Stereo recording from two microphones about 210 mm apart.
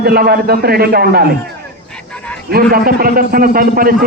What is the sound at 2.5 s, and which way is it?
A man's voice, 45° right (ahead or behind).